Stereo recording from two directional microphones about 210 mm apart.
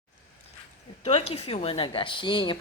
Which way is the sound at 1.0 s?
25° left (ahead or behind).